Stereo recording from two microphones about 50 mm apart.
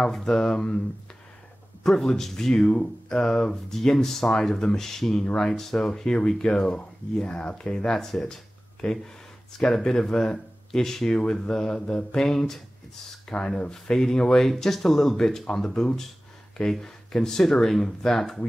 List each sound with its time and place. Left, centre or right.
0.0 s speech: centre
1.8 s speech: centre
9.6 s speech: centre
13.3 s speech: centre